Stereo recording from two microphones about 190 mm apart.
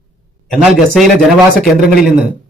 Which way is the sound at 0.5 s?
Centre (ahead or behind).